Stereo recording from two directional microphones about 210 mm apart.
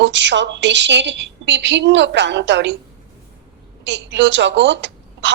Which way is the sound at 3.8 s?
60° right (ahead or behind).